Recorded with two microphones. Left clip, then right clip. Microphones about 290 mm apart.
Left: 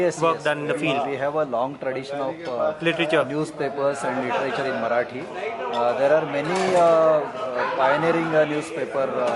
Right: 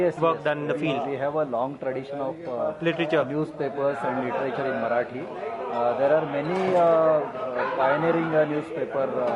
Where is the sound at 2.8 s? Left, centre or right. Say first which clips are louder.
Left 2 dB; centre.